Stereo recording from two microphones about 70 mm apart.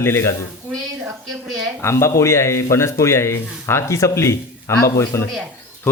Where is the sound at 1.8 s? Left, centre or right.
Left.